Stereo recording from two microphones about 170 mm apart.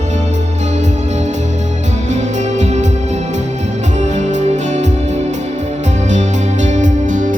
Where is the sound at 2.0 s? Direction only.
45° right (ahead or behind).